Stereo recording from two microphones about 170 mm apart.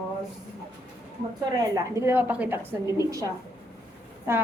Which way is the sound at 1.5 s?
20° right (ahead or behind).